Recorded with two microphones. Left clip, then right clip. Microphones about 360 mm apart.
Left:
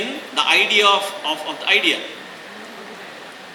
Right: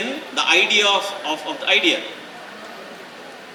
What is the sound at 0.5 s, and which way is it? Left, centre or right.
A man's voice, centre.